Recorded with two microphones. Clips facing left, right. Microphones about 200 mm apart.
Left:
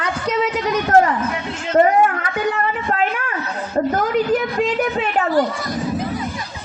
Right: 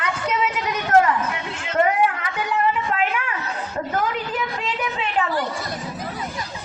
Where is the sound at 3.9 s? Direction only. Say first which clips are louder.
Left 7 dB; 40° left (ahead or behind).